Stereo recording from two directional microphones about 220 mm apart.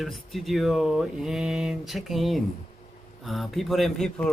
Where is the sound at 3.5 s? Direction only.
Centre (ahead or behind).